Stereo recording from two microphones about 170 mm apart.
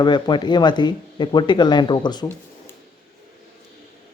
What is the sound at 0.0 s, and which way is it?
Speech, 25° left (ahead or behind).